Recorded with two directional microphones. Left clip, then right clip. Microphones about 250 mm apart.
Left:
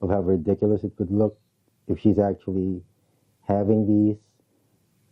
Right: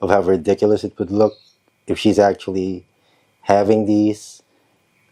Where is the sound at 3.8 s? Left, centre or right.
Right.